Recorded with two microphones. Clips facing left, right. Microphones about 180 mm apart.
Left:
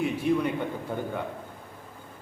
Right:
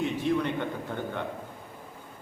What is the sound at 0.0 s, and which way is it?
Speech, 5° left (ahead or behind).